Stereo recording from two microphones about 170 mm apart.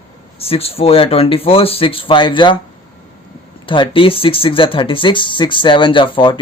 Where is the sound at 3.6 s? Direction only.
30° left (ahead or behind).